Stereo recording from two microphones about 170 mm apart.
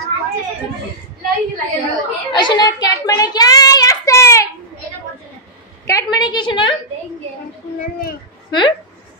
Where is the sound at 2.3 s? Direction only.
25° left (ahead or behind).